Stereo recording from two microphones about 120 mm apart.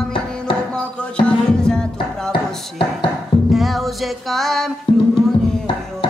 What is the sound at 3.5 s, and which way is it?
Speech, centre (ahead or behind).